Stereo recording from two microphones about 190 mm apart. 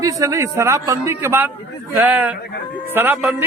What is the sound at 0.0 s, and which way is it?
Speech, 15° right (ahead or behind).